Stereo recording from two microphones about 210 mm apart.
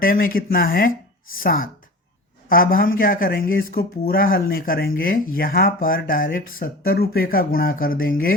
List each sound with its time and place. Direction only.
0.0 s speech: 45° left (ahead or behind)